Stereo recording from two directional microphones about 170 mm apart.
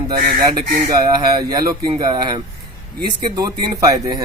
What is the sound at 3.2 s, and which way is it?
Speech, 20° right (ahead or behind).